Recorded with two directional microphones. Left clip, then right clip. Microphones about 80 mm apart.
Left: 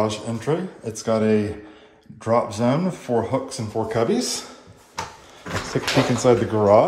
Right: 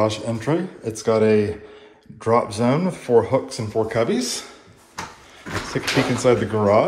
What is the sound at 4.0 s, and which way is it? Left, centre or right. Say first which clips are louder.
Speech: even; left.